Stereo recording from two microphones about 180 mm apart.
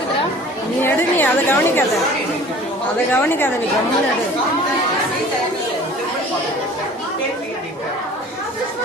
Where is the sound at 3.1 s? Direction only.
10° left (ahead or behind).